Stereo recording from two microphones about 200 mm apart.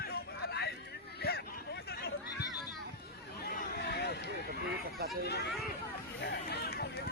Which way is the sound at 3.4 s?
55° left (ahead or behind).